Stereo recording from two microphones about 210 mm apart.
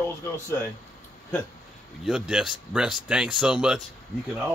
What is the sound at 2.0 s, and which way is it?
Speech, 5° right (ahead or behind).